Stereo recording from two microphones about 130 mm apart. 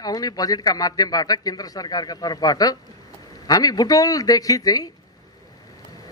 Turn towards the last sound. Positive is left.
turn(degrees=30)  # may be behind; listen again after turning